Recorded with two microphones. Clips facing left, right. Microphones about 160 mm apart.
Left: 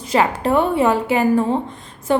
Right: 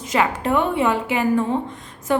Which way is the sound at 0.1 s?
35° left (ahead or behind).